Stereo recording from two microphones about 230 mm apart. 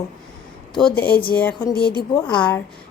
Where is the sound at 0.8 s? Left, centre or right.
Centre.